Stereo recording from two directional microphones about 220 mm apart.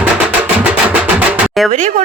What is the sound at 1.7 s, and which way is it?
Speech, 35° right (ahead or behind).